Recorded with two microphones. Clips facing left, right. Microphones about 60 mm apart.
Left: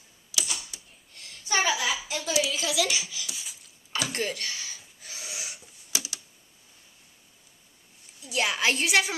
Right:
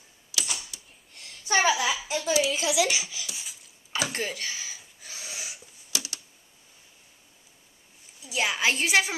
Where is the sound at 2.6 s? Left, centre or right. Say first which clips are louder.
Right 2 dB; centre.